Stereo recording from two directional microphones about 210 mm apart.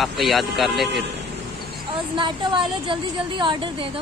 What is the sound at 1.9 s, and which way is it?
A woman's voice, 20° right (ahead or behind).